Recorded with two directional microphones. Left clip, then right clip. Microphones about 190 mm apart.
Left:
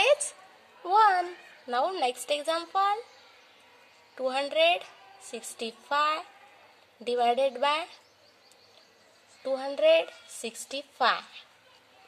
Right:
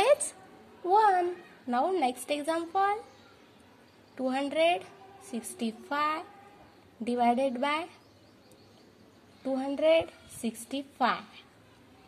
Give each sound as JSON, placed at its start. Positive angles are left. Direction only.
{"t": 0.8, "sound": "a sound", "side_deg": 35}
{"t": 1.7, "sound": "a woman's voice", "side_deg": 35}
{"t": 4.2, "sound": "a woman's voice", "side_deg": 35}
{"t": 9.4, "sound": "a woman's voice", "side_deg": 35}